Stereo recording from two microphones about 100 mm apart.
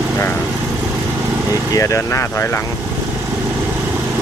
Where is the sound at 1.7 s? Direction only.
35° left (ahead or behind).